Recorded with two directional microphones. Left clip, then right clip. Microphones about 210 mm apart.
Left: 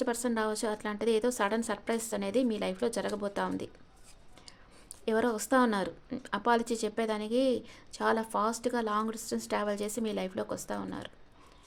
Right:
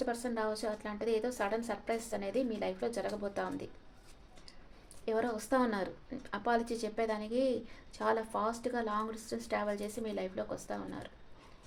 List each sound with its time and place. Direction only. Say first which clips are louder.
0.0 s speech: left 4 dB; 40° left (ahead or behind)
5.0 s speech: left 4 dB; 40° left (ahead or behind)